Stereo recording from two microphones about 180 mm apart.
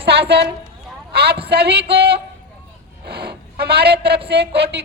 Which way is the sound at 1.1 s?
65° right (ahead or behind).